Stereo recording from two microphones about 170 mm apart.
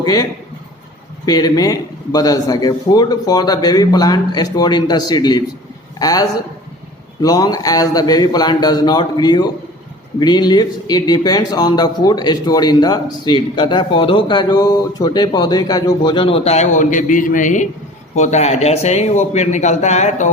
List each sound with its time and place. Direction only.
0.0 s a man's voice: 25° left (ahead or behind); by 20.3 s 45° left (ahead or behind)